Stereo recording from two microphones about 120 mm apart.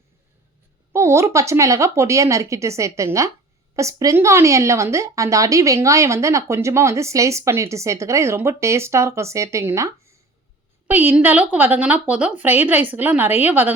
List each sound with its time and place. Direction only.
0.9 s a woman's voice: 25° right (ahead or behind)